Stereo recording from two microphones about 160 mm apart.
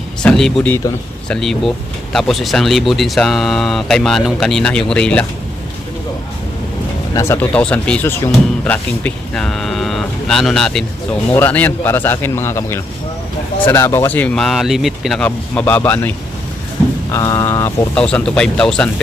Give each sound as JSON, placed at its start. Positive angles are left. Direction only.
{"t": 0.2, "sound": "speech", "side_deg": 5}
{"t": 7.1, "sound": "speech", "side_deg": 15}
{"t": 17.9, "sound": "speech", "side_deg": 5}